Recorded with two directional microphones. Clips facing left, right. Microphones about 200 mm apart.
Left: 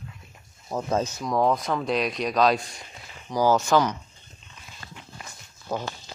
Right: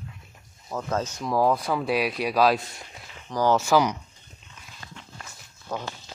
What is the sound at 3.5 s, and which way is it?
Speech, 10° right (ahead or behind).